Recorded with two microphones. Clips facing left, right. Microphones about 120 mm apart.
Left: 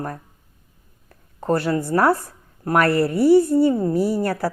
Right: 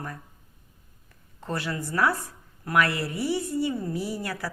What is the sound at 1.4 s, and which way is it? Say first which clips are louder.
A woman's voice: left 11 dB; 40° left (ahead or behind).